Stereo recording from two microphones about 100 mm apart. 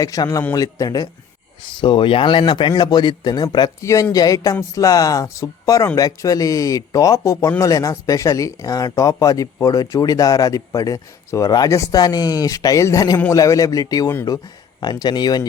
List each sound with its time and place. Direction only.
0.0 s speech: 35° left (ahead or behind)
1.7 s speech: 55° left (ahead or behind)
3.8 s speech: 30° left (ahead or behind)